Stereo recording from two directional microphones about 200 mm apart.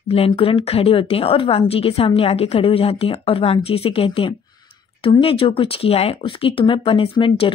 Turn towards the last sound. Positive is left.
turn(degrees=25)  # may be behind; listen again after turning